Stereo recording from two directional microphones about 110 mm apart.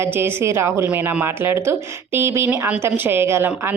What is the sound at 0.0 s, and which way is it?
A woman's voice, 20° right (ahead or behind).